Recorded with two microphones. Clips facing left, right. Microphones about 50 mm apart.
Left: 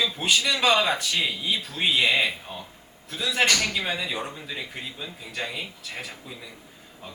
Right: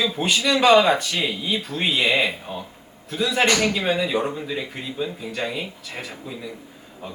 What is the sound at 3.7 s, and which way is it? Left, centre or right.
Speech, centre.